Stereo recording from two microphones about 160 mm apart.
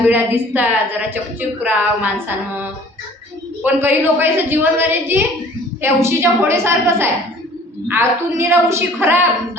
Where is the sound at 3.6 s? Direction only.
15° right (ahead or behind).